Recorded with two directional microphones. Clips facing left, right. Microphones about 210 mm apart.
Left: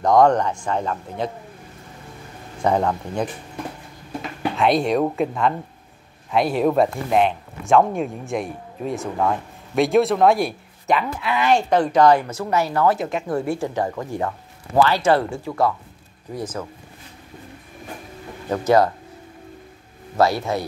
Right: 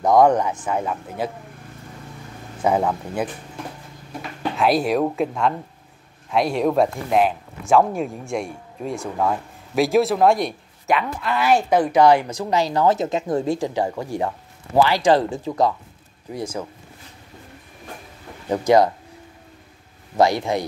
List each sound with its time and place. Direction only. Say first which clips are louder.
0.0 s speech: even; 10° right (ahead or behind)
2.6 s speech: even; 5° right (ahead or behind)
4.4 s speech: even; centre (ahead or behind)
18.5 s speech: right 1 dB; 15° right (ahead or behind)
20.2 s speech: right 1 dB; 15° right (ahead or behind)